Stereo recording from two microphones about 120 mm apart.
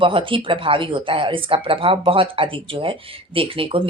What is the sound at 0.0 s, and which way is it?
Speech, 45° right (ahead or behind).